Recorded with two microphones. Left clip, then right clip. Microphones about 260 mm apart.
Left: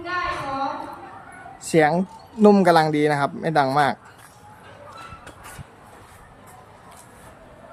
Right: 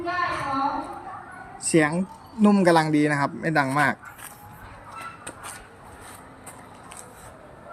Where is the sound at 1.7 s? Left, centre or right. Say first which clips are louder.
Left 4 dB; centre.